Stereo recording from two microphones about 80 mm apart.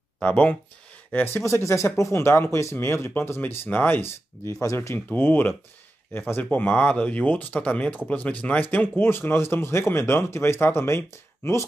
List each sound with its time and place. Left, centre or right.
0.2 s speech: centre
1.1 s speech: left
4.9 s speech: left